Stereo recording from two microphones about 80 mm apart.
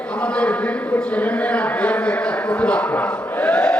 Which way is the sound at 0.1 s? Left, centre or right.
Centre.